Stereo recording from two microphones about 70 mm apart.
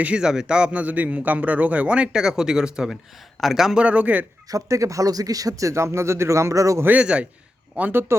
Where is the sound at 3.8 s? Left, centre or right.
Right.